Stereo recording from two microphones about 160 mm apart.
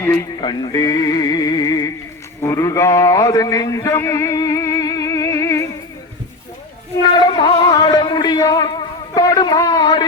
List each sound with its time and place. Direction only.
0.0 s music: 20° left (ahead or behind)
2.4 s a man's voice: 20° left (ahead or behind)
7.2 s a sound: 25° left (ahead or behind)